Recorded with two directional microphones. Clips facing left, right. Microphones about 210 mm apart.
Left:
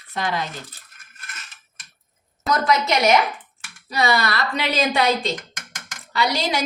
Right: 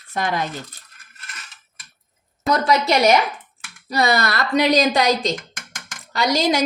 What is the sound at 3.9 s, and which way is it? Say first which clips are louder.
A woman's voice: right 2 dB; 40° right (ahead or behind).